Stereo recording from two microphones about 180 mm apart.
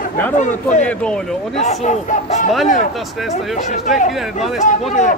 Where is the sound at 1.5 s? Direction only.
40° left (ahead or behind).